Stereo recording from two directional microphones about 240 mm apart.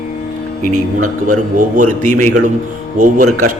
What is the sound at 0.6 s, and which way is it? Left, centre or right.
A man's voice, right.